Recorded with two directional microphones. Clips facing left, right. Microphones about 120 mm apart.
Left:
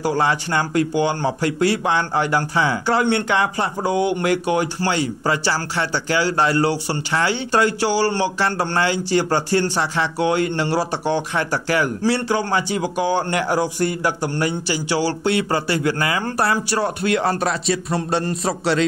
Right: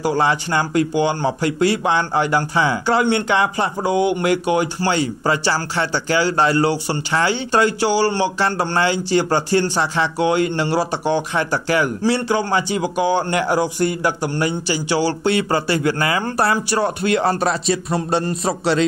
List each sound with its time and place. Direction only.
0.0 s speech: 20° right (ahead or behind)